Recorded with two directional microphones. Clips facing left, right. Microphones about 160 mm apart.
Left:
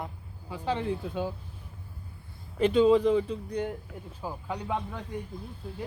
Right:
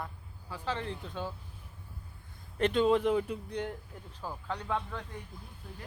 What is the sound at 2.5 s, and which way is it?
Speech, centre (ahead or behind).